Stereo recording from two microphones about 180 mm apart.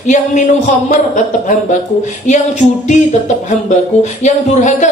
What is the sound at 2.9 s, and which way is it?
Speech, 40° left (ahead or behind).